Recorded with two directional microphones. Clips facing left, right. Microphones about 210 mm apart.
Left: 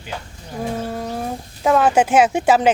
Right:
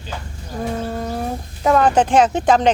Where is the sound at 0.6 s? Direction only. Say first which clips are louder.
Right 1 dB; 5° left (ahead or behind).